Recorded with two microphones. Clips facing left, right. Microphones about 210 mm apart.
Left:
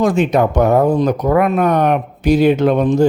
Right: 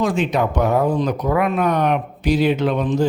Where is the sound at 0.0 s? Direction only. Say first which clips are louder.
Left 5 dB; 45° left (ahead or behind).